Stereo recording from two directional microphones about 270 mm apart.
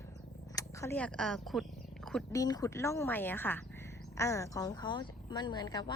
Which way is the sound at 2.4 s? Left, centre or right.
Centre.